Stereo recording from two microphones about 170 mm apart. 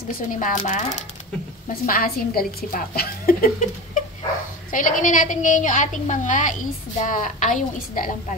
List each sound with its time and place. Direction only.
0.1 s a woman's voice: 50° left (ahead or behind)
1.7 s a woman's voice: 60° left (ahead or behind)
4.6 s a woman's voice: 50° left (ahead or behind)